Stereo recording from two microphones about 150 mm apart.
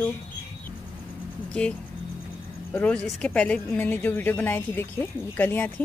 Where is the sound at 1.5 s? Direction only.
5° left (ahead or behind).